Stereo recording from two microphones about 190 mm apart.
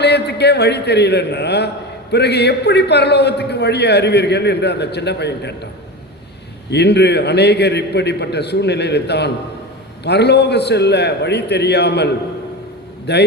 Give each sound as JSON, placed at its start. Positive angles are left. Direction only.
{"t": 0.0, "sound": "a man's voice", "side_deg": 60}
{"t": 6.7, "sound": "a man's voice", "side_deg": 60}
{"t": 13.1, "sound": "a man's voice", "side_deg": 60}